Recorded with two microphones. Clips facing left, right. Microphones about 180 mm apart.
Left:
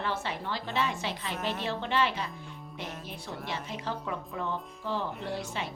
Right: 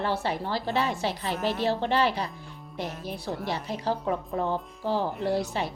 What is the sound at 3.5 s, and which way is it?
Speech, 35° right (ahead or behind).